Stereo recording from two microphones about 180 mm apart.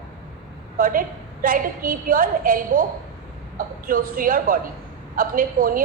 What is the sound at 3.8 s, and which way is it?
A woman's voice, 50° right (ahead or behind).